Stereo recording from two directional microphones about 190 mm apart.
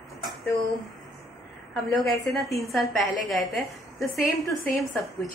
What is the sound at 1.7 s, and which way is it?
A woman's voice, centre (ahead or behind).